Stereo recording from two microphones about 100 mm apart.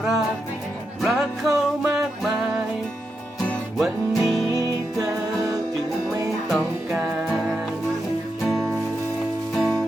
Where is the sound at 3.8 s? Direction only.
Centre (ahead or behind).